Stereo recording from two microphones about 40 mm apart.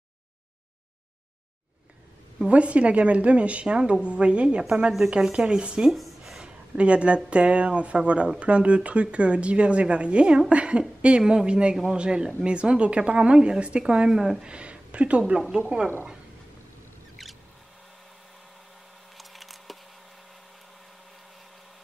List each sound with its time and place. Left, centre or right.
2.4 s speech: right
5.2 s speech: centre
5.6 s speech: right
5.9 s speech: centre
6.8 s speech: right
11.7 s speech: centre
12.0 s speech: right
14.1 s speech: centre
14.4 s speech: right
19.1 s a sound: centre